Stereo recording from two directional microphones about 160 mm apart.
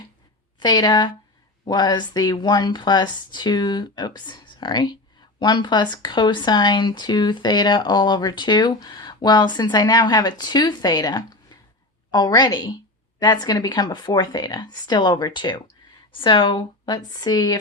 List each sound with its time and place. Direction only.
0.6 s speech: 25° left (ahead or behind)